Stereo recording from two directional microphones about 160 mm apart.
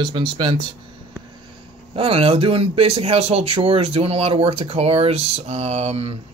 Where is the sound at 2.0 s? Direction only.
35° right (ahead or behind).